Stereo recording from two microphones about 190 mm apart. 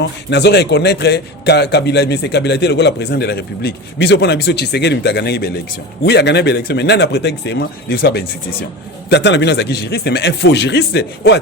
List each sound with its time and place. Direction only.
0.3 s a man's voice: 65° left (ahead or behind)